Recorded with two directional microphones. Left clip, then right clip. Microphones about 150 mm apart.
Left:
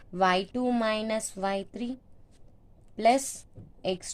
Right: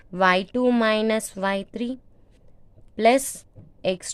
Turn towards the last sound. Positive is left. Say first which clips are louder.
# right 6 dB
turn(degrees=-50)  # may be behind; listen again after turning